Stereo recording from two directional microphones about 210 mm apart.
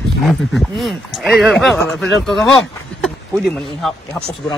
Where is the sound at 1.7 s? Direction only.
10° left (ahead or behind).